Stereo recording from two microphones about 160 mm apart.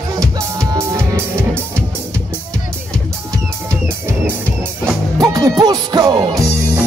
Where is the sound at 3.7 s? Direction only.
15° right (ahead or behind).